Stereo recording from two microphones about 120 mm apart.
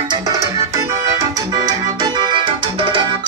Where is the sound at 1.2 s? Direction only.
35° right (ahead or behind).